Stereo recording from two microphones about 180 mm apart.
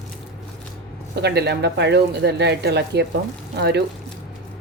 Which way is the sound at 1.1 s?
65° right (ahead or behind).